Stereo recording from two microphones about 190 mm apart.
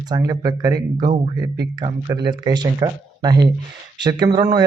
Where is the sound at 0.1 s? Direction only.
20° right (ahead or behind).